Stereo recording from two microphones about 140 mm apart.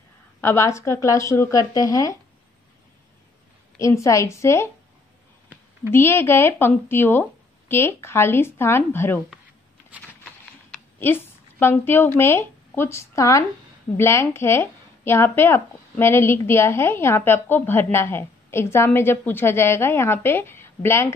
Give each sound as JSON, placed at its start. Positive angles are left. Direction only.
{"t": 0.4, "sound": "speech", "side_deg": 20}
{"t": 3.7, "sound": "speech", "side_deg": 20}
{"t": 5.9, "sound": "speech", "side_deg": 15}
{"t": 11.0, "sound": "a woman's voice", "side_deg": 15}